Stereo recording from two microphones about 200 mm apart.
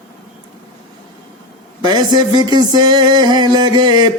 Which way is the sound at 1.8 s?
20° right (ahead or behind).